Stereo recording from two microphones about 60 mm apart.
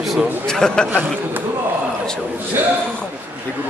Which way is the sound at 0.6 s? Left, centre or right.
Centre.